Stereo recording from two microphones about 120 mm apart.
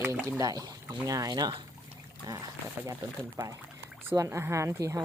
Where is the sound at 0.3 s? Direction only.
30° right (ahead or behind).